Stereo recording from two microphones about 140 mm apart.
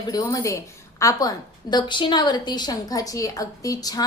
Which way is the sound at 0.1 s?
25° left (ahead or behind).